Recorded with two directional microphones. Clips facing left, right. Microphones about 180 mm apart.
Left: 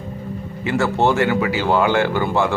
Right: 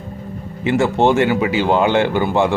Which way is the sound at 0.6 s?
20° right (ahead or behind).